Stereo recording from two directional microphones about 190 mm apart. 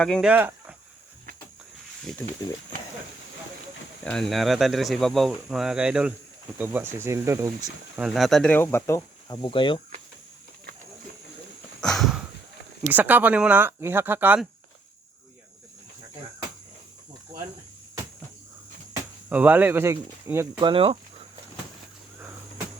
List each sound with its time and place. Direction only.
0.0 s speech: 5° left (ahead or behind)
0.3 s a sound: 10° right (ahead or behind)
2.1 s speech: 5° left (ahead or behind)
4.0 s speech: 5° left (ahead or behind); by 7.7 s 15° right (ahead or behind)
7.9 s speech: centre (ahead or behind); by 9.4 s 15° left (ahead or behind)
9.4 s speech: 25° left (ahead or behind)
11.8 s a sound: centre (ahead or behind)
12.9 s speech: 10° right (ahead or behind)
19.3 s speech: 10° right (ahead or behind)
20.7 s speech: 30° right (ahead or behind)